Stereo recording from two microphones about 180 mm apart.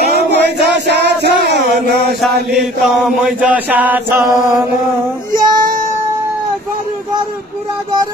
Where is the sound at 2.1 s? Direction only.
Centre (ahead or behind).